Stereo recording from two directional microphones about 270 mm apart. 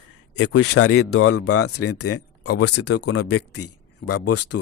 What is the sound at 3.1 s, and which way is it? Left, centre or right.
Speech, left.